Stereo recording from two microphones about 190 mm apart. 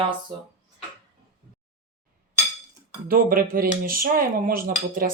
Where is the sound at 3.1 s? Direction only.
50° right (ahead or behind).